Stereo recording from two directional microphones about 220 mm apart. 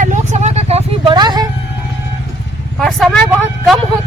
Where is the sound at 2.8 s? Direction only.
Centre (ahead or behind).